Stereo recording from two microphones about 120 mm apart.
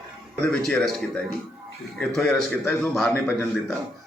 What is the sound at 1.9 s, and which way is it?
A man's voice, 5° left (ahead or behind).